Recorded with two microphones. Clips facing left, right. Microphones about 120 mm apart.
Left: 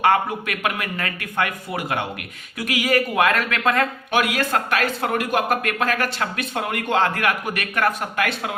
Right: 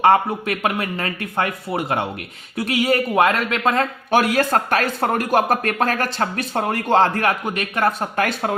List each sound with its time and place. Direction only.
0.0 s a man's voice: 30° right (ahead or behind)
4.1 s speech: 40° right (ahead or behind)